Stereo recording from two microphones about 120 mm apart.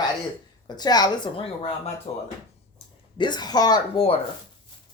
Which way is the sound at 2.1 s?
60° left (ahead or behind).